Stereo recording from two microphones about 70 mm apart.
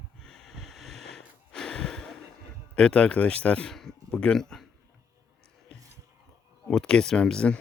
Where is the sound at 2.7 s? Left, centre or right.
Centre.